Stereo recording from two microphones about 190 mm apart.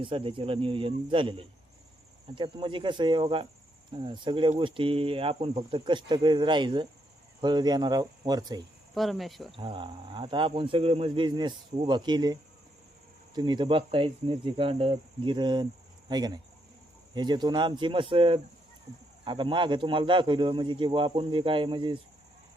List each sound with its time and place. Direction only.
0.0 s speech: 25° right (ahead or behind)
9.0 s speech: centre (ahead or behind)
9.6 s speech: 25° right (ahead or behind)